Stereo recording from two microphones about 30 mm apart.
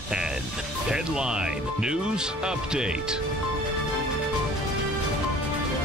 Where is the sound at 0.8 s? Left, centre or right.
Right.